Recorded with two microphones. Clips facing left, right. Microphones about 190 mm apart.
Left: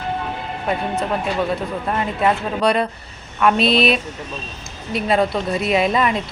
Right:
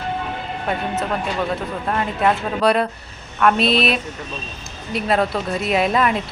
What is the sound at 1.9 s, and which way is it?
Speech, 5° left (ahead or behind).